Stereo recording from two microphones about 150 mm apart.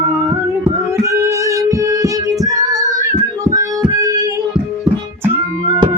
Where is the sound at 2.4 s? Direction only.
25° right (ahead or behind).